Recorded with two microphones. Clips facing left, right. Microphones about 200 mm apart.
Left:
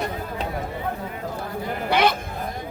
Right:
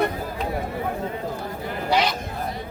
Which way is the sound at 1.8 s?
55° left (ahead or behind).